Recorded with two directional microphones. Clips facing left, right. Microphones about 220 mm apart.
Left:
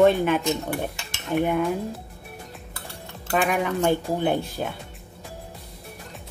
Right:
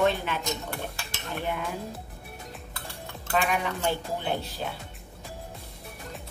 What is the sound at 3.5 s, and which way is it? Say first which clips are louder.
Speech: left 6 dB; 50° left (ahead or behind).